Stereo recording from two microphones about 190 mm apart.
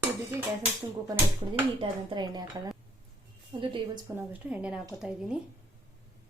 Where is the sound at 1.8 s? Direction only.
25° right (ahead or behind).